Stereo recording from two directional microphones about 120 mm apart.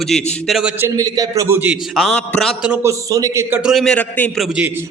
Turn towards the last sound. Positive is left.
turn(degrees=10)  # may be behind; listen again after turning